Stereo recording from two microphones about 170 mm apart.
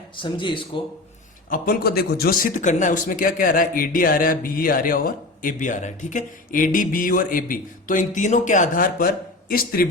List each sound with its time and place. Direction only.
0.2 s speech: 30° left (ahead or behind)
1.5 s a man's voice: 60° left (ahead or behind)